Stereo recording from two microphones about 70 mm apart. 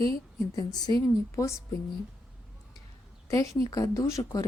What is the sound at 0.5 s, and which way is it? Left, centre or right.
Speech, left.